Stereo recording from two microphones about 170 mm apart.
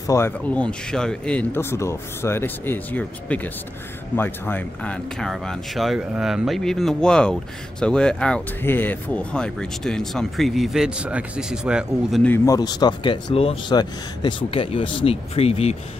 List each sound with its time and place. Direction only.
0.0 s speech: 20° left (ahead or behind)
0.6 s speech: 5° left (ahead or behind)
12.2 s speech: 10° left (ahead or behind)
12.5 s speech: 25° left (ahead or behind)